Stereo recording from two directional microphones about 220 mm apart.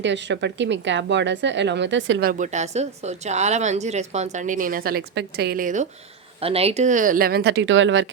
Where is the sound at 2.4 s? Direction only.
30° right (ahead or behind).